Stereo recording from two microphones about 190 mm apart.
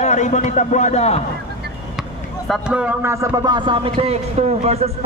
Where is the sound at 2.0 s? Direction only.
Centre (ahead or behind).